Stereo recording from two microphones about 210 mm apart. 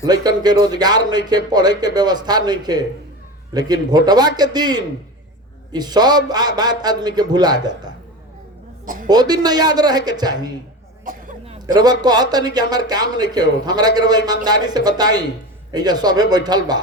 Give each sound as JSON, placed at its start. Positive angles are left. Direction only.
{"t": 0.0, "sound": "a man's voice", "side_deg": -20}
{"t": 9.0, "sound": "a man's voice", "side_deg": -20}
{"t": 11.0, "sound": "cough", "side_deg": -40}
{"t": 11.6, "sound": "a man's voice", "side_deg": -20}